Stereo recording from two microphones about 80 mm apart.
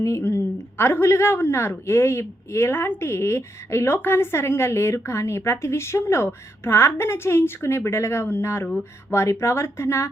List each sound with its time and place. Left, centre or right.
0.0 s a woman's voice: left